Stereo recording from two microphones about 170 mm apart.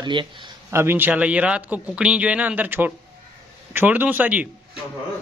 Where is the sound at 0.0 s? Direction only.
30° right (ahead or behind).